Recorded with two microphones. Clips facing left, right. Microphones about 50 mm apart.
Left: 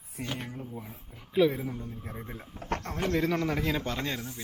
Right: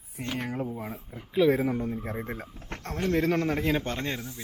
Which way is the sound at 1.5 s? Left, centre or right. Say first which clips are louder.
Right 10 dB; right.